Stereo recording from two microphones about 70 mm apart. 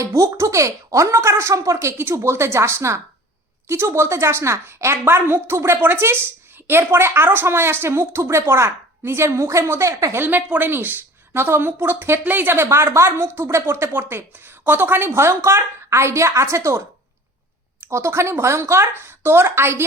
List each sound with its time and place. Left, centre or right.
0.0 s a woman's voice: right
10.2 s a woman's voice: right
17.8 s a woman's voice: right